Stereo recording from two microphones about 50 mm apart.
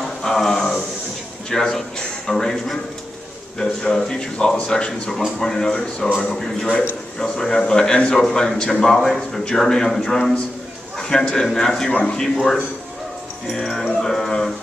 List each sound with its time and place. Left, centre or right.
0.2 s a sound: centre
1.5 s a man's voice: centre
9.4 s speech: centre
11.0 s a sound: centre
11.5 s speech: centre
13.5 s speech: centre